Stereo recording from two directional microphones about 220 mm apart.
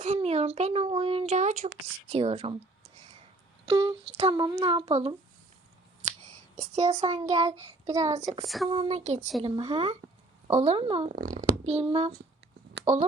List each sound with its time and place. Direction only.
0.0 s a child's voice: 30° right (ahead or behind)
3.7 s a child's voice: 25° right (ahead or behind)
6.6 s a child's voice: 30° right (ahead or behind)
7.2 s a woman's voice: 20° right (ahead or behind)
8.4 s speech: centre (ahead or behind)
8.7 s a child's voice: 25° right (ahead or behind)
11.1 s a child's voice: 40° right (ahead or behind)